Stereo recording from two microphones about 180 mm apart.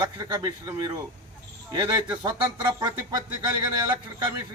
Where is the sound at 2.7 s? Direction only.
25° right (ahead or behind).